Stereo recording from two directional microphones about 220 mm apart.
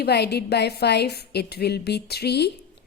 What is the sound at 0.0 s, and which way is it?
A woman's voice, 50° left (ahead or behind).